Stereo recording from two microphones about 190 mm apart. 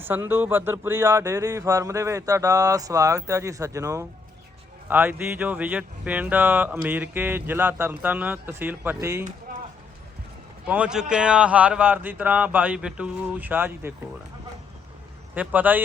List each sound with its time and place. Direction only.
0.0 s speech: 10° right (ahead or behind)
10.7 s speech: 5° right (ahead or behind)
15.4 s speech: 10° right (ahead or behind)